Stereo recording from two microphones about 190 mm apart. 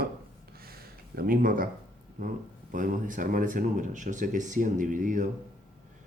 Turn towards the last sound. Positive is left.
turn(degrees=-45)  # may be behind; listen again after turning